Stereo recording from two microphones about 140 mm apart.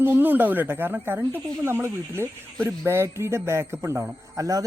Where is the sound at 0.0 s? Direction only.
15° right (ahead or behind).